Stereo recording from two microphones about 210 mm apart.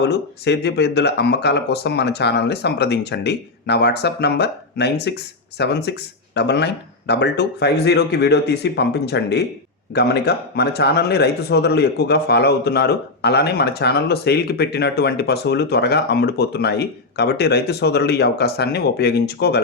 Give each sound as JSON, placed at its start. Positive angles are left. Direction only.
{"t": 0.0, "sound": "speech", "side_deg": 55}